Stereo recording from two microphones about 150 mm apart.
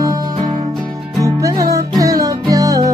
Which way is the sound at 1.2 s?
25° right (ahead or behind).